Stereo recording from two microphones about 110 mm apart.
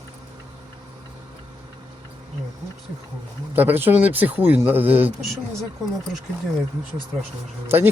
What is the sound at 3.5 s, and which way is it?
Speech, 20° right (ahead or behind).